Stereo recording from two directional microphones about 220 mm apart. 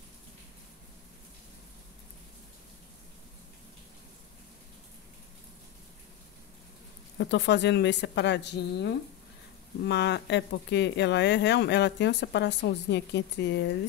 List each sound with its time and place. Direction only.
7.2 s speech: 50° left (ahead or behind)